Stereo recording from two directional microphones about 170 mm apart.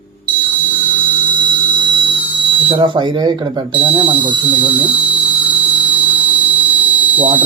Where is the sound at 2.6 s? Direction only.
25° right (ahead or behind).